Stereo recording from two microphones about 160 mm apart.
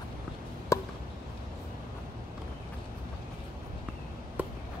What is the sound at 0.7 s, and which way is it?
Chop, 20° left (ahead or behind).